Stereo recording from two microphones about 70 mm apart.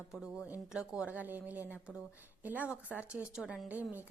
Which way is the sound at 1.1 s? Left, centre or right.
Right.